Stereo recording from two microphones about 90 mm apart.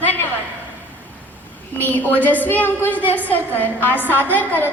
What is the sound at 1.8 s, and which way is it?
A woman's voice, 20° left (ahead or behind).